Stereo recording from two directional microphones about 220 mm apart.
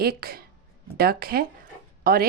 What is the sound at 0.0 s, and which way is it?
Speech, 45° right (ahead or behind).